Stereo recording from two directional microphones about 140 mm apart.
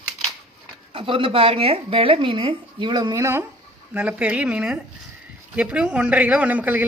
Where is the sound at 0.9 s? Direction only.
40° right (ahead or behind).